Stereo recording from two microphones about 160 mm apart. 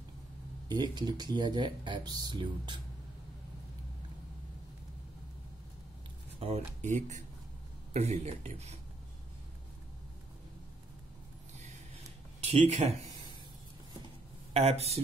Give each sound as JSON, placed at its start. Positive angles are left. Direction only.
{"t": 0.7, "sound": "speech", "side_deg": -25}
{"t": 6.4, "sound": "speech", "side_deg": -45}
{"t": 12.4, "sound": "speech", "side_deg": -40}
{"t": 14.5, "sound": "speech", "side_deg": -40}